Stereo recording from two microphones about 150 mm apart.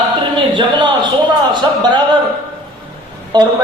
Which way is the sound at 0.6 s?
30° right (ahead or behind).